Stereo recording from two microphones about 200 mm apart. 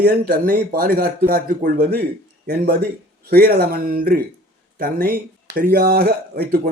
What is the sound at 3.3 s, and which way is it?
Speech, 50° right (ahead or behind).